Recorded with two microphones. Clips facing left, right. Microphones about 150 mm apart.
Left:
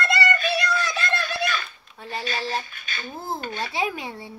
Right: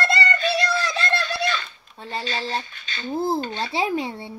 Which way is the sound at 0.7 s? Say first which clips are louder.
Right 1 dB; 30° right (ahead or behind).